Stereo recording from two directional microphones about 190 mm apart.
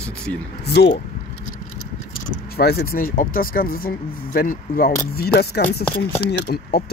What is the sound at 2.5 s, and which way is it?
Speech, 55° left (ahead or behind).